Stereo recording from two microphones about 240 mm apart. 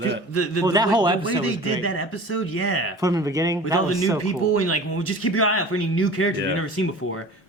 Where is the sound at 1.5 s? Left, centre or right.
Left.